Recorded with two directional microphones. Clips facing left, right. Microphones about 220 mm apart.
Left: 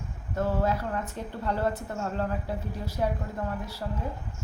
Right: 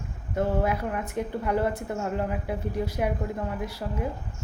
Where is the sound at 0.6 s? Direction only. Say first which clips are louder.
Right 1 dB; 15° right (ahead or behind).